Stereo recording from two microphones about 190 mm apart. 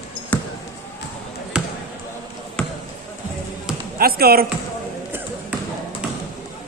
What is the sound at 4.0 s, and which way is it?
Speech, 55° right (ahead or behind).